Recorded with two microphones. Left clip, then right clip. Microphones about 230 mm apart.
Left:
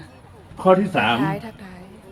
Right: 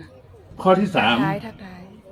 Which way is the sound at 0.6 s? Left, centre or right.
Right.